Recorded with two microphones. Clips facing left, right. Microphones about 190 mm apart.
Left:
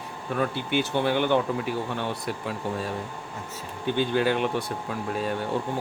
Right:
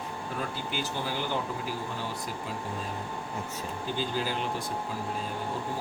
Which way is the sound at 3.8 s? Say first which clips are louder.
Left 9 dB; 65° left (ahead or behind).